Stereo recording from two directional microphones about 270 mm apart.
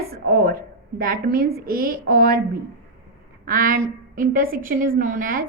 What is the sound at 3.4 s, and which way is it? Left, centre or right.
A woman's voice, right.